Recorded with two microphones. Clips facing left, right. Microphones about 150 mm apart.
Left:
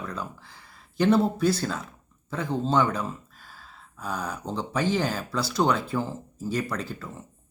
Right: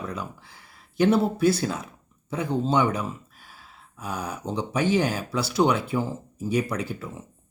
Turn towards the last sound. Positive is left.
turn(degrees=-10)  # may be behind; listen again after turning